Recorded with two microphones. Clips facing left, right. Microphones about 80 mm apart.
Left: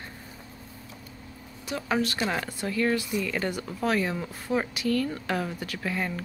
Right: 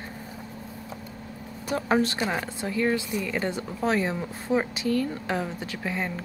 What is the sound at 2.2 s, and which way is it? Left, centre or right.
Speech, centre.